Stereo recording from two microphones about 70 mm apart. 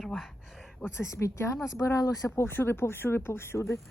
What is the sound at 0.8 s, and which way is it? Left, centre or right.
Speech, left.